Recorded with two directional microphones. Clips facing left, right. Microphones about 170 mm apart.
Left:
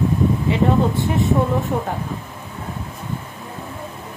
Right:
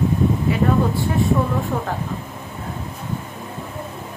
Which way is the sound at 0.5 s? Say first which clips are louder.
Left 2 dB; 20° left (ahead or behind).